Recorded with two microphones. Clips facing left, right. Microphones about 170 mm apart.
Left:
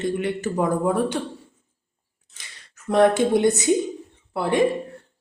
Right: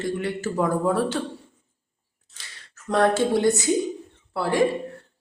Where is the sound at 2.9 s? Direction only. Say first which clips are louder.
Left 3 dB; 20° left (ahead or behind).